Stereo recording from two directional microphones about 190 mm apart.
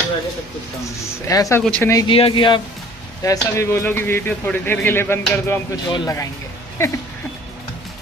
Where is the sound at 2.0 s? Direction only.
30° left (ahead or behind).